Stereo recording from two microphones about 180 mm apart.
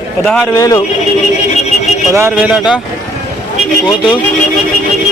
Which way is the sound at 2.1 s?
10° right (ahead or behind).